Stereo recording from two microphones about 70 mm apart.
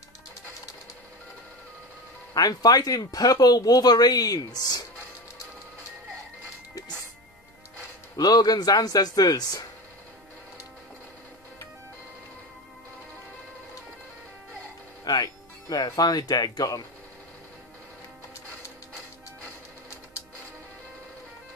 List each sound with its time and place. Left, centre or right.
2.3 s speech: left
8.2 s speech: left
15.0 s speech: left